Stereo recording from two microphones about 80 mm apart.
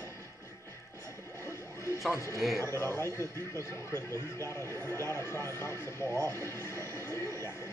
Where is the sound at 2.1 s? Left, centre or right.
Left.